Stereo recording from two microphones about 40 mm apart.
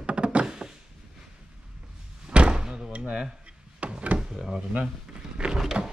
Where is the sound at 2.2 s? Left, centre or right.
Right.